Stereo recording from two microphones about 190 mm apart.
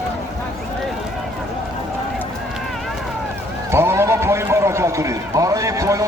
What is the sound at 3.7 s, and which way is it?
A man's voice, 15° right (ahead or behind).